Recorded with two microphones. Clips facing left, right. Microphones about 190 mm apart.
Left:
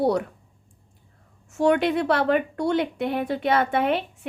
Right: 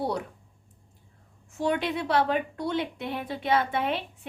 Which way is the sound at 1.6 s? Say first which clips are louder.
Left 7 dB; 55° left (ahead or behind).